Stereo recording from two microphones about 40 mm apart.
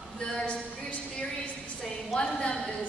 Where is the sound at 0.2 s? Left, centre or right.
Centre.